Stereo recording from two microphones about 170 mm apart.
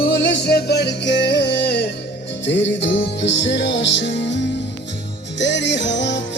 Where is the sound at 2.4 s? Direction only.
90° left.